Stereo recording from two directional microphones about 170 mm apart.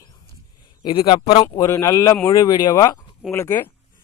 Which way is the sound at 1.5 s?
20° left (ahead or behind).